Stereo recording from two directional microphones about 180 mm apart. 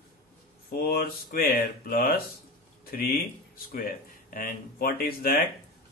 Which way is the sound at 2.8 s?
55° left (ahead or behind).